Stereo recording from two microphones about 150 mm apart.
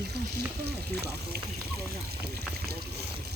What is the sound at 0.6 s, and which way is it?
Speech, 90° right.